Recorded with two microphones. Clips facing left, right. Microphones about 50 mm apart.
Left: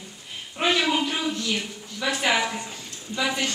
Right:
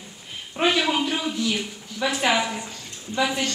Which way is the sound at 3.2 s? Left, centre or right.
Centre.